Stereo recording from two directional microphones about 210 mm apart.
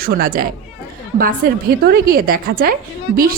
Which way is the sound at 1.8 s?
45° right (ahead or behind).